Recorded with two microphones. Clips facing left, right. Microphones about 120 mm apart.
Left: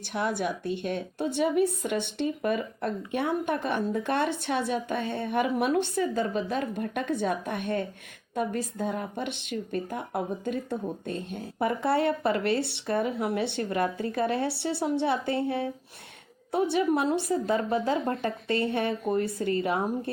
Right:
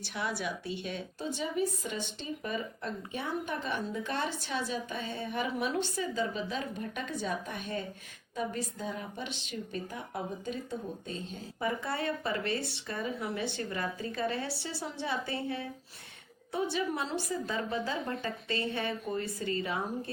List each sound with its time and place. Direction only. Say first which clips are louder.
0.1 s a woman's voice: left 7 dB; 50° left (ahead or behind)